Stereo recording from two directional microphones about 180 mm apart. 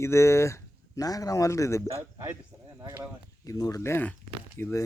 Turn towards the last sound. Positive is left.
turn(degrees=10)  # may be behind; listen again after turning